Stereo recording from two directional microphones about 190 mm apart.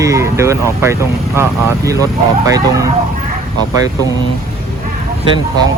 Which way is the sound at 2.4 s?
15° right (ahead or behind).